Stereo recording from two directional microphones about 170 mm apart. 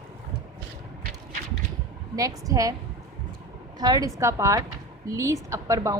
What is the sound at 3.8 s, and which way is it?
A woman's voice, 20° right (ahead or behind).